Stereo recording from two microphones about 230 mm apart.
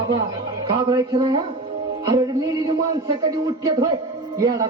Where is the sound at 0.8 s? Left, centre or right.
Centre.